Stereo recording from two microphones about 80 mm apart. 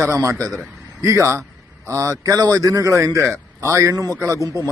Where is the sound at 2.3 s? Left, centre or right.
Right.